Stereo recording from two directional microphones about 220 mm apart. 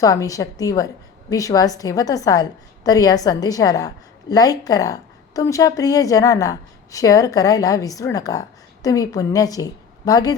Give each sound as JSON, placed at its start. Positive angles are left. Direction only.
{"t": 0.0, "sound": "a woman's voice", "side_deg": 15}